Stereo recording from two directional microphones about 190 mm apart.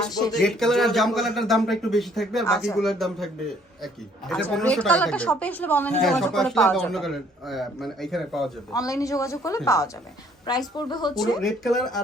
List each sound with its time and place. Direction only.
0.1 s a woman's voice: 20° left (ahead or behind)
0.3 s a man's voice: centre (ahead or behind)
4.3 s a man's voice: 5° left (ahead or behind)
8.7 s a woman's voice: 20° left (ahead or behind)
11.3 s a man's voice: centre (ahead or behind)